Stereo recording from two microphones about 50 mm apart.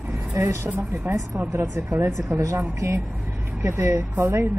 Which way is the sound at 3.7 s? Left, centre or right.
Right.